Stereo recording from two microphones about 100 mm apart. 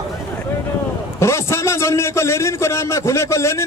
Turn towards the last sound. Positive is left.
turn(degrees=30)  # may be behind; listen again after turning